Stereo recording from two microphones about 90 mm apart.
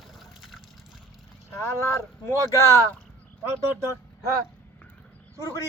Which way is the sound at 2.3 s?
35° left (ahead or behind).